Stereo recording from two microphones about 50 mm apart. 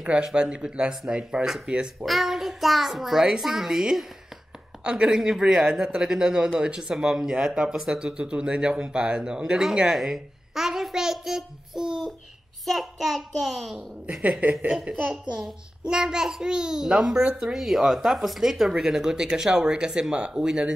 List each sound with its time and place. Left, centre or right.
0.0 s speech: centre
2.0 s a child's voice: centre
9.9 s a sound: centre
12.6 s a child's voice: centre
14.4 s a woman's voice: right
15.0 s a child's voice: centre
15.9 s speech: centre